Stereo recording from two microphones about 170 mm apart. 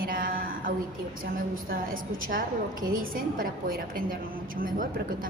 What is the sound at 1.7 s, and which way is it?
A woman's voice, 55° right (ahead or behind).